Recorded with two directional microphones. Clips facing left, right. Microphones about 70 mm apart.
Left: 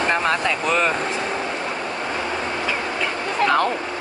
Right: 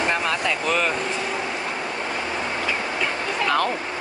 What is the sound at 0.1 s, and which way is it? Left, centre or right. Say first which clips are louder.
Speech: left 3 dB; left.